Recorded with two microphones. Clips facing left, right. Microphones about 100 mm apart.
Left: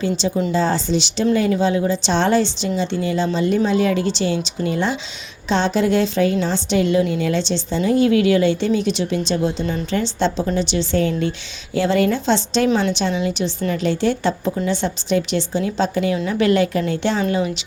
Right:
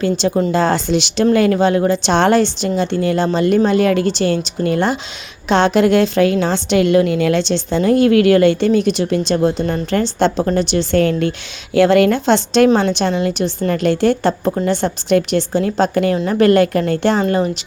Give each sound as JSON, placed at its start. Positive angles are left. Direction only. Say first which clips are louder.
{"t": 0.0, "sound": "a woman's voice", "louder": "right 4 dB", "side_deg": -60}